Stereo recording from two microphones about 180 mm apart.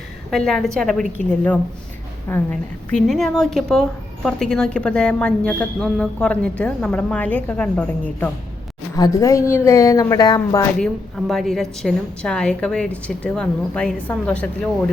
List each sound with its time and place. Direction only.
0.3 s speech: centre (ahead or behind)
9.0 s speech: 20° left (ahead or behind)
11.3 s speech: centre (ahead or behind)